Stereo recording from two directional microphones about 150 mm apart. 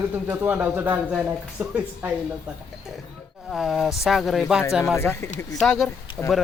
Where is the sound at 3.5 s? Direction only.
Centre (ahead or behind).